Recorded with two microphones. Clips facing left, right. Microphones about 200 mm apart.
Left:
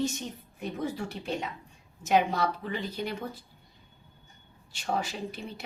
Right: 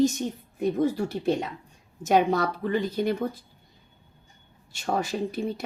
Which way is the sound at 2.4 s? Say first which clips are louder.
Right 5 dB; 50° right (ahead or behind).